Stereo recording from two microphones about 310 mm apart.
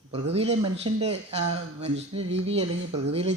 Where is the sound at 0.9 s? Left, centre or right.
Right.